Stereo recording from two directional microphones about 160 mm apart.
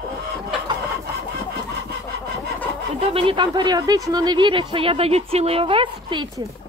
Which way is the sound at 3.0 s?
35° right (ahead or behind).